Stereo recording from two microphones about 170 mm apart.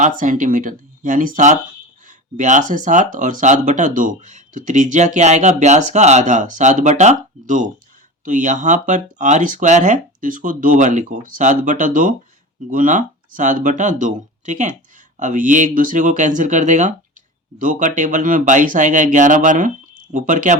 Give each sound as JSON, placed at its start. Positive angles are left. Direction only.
{"t": 0.0, "sound": "speech", "side_deg": -50}